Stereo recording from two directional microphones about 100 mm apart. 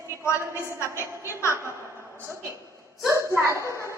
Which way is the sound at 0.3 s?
25° left (ahead or behind).